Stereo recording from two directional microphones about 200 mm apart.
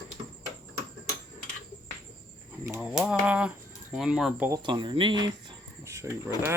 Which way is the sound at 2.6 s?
15° right (ahead or behind).